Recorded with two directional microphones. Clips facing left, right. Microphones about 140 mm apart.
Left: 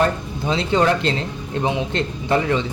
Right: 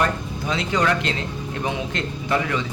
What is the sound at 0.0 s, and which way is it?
Speech, 30° left (ahead or behind).